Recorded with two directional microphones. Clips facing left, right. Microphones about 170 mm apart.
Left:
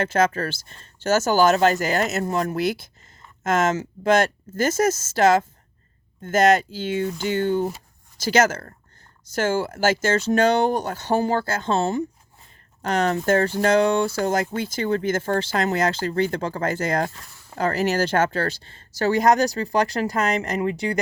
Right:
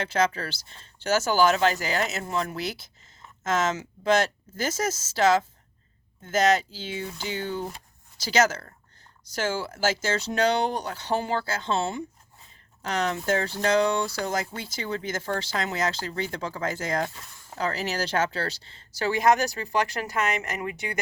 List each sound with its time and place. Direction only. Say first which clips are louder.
0.0 s speech: left 5 dB; 50° left (ahead or behind); by 21.0 s 35° left (ahead or behind)